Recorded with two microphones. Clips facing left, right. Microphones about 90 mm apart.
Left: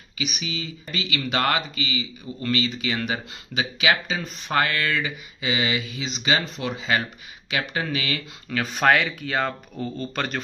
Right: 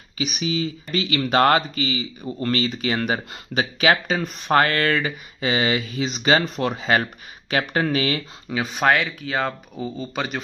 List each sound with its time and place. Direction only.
0.2 s speech: 35° right (ahead or behind)
8.7 s speech: 5° right (ahead or behind)